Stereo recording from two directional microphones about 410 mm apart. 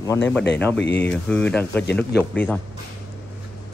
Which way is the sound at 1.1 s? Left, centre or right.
Centre.